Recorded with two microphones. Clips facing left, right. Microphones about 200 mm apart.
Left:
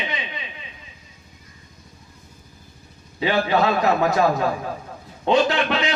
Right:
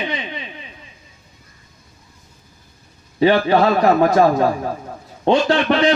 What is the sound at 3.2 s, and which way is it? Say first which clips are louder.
A man's voice: right 6 dB; 35° right (ahead or behind).